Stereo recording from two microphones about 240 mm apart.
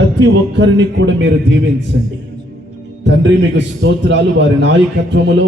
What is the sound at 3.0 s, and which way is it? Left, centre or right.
A man's voice, right.